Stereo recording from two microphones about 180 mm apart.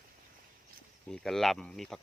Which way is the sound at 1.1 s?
Centre (ahead or behind).